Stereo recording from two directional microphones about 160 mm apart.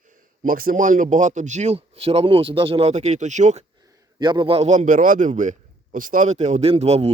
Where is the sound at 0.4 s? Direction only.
60° right (ahead or behind).